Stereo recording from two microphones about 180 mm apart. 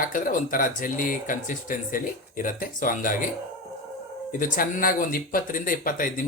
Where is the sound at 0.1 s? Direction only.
50° left (ahead or behind).